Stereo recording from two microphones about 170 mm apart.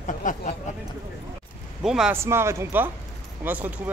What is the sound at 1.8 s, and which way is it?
Speech, 5° right (ahead or behind).